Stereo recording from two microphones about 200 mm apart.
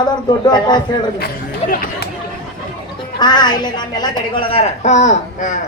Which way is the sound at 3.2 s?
20° left (ahead or behind).